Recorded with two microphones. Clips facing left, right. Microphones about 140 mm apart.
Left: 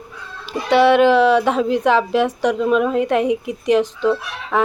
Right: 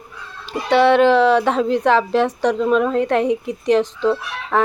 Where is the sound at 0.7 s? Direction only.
25° right (ahead or behind).